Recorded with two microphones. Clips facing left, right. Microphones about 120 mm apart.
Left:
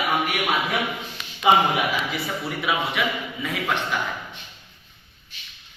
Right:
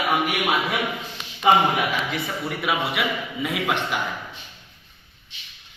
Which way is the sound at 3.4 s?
15° right (ahead or behind).